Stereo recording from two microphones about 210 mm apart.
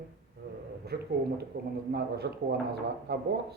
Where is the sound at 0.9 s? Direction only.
45° right (ahead or behind).